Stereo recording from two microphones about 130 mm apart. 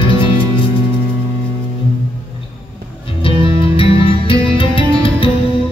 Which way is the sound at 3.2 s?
45° left (ahead or behind).